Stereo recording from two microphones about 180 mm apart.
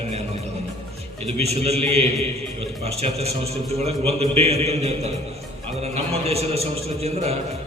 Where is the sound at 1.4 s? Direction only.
35° right (ahead or behind).